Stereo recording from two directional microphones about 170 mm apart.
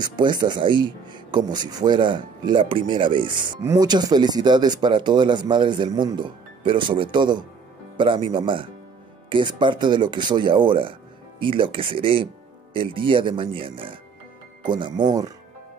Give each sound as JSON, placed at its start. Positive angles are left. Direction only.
{"t": 0.0, "sound": "speech", "side_deg": -25}